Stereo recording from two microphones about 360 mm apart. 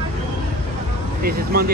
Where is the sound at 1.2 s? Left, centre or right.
Right.